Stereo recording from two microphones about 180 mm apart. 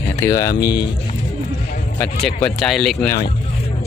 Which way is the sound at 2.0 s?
5° left (ahead or behind).